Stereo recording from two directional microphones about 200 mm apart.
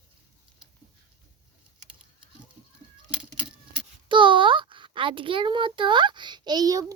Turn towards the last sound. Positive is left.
turn(degrees=-20)  # may be behind; listen again after turning